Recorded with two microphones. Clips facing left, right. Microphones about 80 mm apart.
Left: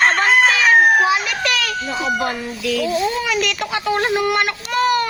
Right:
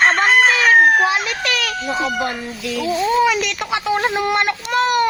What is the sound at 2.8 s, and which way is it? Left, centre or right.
A child's voice, centre.